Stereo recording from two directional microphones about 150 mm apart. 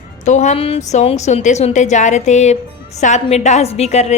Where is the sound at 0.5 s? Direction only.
40° left (ahead or behind).